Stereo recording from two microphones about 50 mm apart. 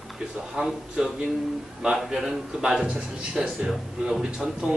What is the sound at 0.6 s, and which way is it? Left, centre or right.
A man's voice, centre.